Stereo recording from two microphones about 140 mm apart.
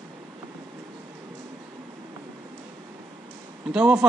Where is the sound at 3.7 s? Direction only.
5° right (ahead or behind).